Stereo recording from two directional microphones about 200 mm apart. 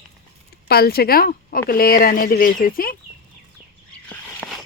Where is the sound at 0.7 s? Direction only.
50° left (ahead or behind).